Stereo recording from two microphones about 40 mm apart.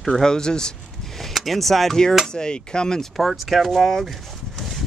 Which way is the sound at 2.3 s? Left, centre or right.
Centre.